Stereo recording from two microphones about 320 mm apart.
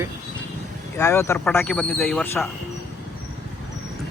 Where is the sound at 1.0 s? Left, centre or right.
Centre.